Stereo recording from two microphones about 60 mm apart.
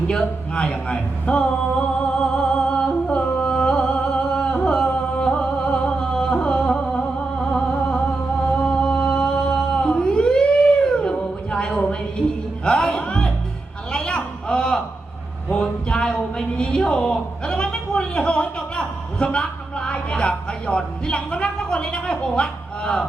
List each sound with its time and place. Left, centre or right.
0.6 s a man's voice: centre
2.0 s music: centre
8.5 s chant: centre
9.2 s a sound: centre
12.6 s music: centre
13.9 s a sound: centre